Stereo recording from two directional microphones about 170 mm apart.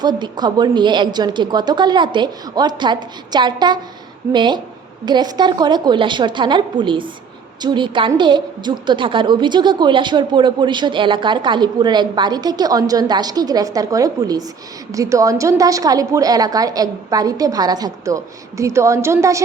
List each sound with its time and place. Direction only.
0.0 s a woman's voice: 25° right (ahead or behind)